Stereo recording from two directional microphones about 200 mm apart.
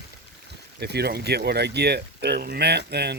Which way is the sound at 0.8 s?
55° right (ahead or behind).